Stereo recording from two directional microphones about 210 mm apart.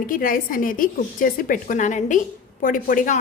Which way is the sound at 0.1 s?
40° left (ahead or behind).